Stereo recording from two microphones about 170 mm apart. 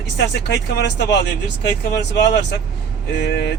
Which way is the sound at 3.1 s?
75° left (ahead or behind).